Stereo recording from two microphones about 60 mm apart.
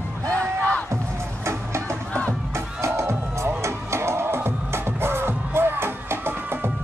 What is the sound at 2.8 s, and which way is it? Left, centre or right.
Music, right.